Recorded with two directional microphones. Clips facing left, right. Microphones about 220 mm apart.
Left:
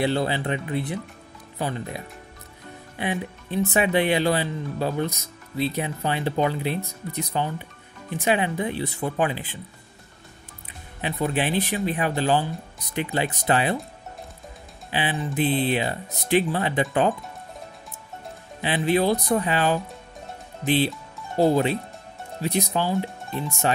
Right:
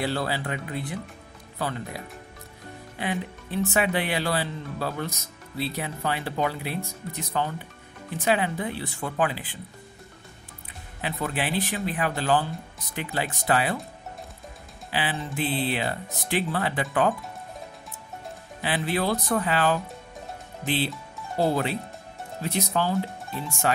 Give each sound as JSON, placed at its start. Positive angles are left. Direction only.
{"t": 0.0, "sound": "speech", "side_deg": 20}
{"t": 11.0, "sound": "speech", "side_deg": 20}
{"t": 14.9, "sound": "speech", "side_deg": 20}
{"t": 18.6, "sound": "speech", "side_deg": 20}